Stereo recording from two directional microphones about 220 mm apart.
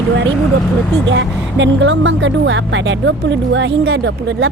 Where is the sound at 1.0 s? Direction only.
55° right (ahead or behind).